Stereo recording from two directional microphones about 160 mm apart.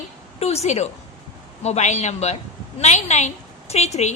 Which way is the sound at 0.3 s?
40° left (ahead or behind).